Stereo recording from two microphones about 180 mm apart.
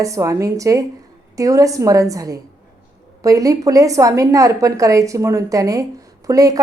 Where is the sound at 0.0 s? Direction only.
20° right (ahead or behind).